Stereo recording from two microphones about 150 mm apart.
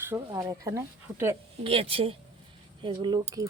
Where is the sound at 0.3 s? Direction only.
20° right (ahead or behind).